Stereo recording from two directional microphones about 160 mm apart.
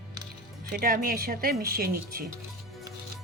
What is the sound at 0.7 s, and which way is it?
Speech, 65° right (ahead or behind).